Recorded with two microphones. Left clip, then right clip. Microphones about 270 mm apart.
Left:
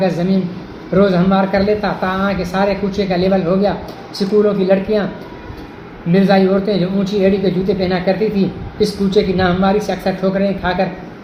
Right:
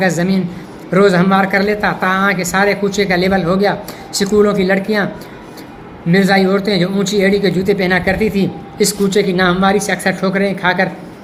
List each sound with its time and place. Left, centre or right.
0.0 s a man's voice: right
6.1 s a man's voice: right